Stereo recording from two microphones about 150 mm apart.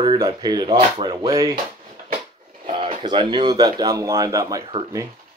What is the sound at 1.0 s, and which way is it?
Speech, 25° right (ahead or behind).